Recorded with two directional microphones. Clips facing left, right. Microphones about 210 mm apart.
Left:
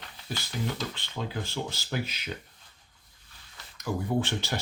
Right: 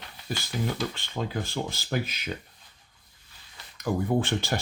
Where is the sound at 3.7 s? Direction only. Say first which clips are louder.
Right 3 dB; 55° right (ahead or behind).